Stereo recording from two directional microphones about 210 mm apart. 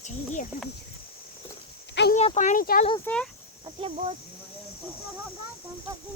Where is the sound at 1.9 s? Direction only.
55° left (ahead or behind).